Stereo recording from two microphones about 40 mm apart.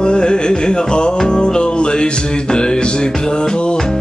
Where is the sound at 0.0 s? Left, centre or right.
Left.